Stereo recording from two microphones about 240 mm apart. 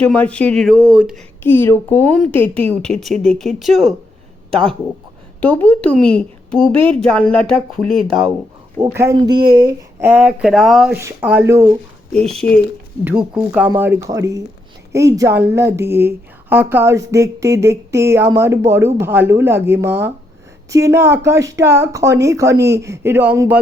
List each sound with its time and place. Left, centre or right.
0.0 s speech: centre
1.5 s speech: centre
4.5 s speech: right
5.4 s speech: centre
8.8 s a woman's voice: centre
12.1 s a woman's voice: centre